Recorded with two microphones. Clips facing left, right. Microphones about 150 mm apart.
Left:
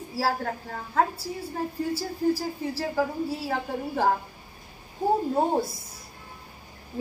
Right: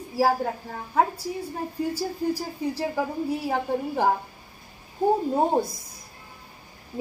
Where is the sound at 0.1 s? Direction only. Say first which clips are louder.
Right 5 dB; 15° right (ahead or behind).